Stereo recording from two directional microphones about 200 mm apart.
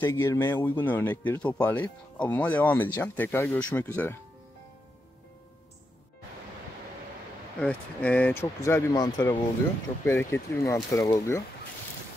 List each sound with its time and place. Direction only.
0.0 s speech: 15° left (ahead or behind)
7.6 s speech: 5° left (ahead or behind)